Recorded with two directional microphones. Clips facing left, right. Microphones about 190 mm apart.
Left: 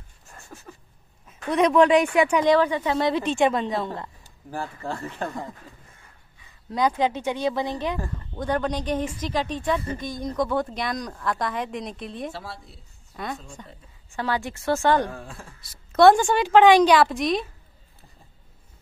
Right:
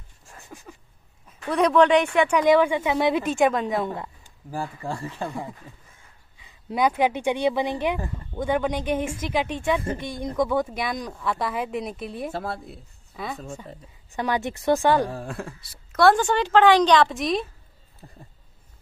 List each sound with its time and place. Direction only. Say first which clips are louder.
0.5 s a sound: right 1 dB; 15° right (ahead or behind)
1.5 s a woman's voice: even; centre (ahead or behind)
2.5 s a woman's voice: right 1 dB; 10° right (ahead or behind)
6.7 s speech: right 1 dB; 10° right (ahead or behind)
9.8 s speech: right 1 dB; 55° right (ahead or behind)
10.8 s a woman's voice: even; 5° right (ahead or behind)
12.3 s speech: right 6 dB; 55° right (ahead or behind)
13.1 s a woman's voice: even; centre (ahead or behind)
14.1 s speech: right 2 dB; 20° right (ahead or behind)
15.2 s speech: right 9 dB; 60° right (ahead or behind)
15.9 s a woman's voice: left 3 dB; 20° left (ahead or behind)
16.2 s a woman's voice: left 2 dB; 10° left (ahead or behind)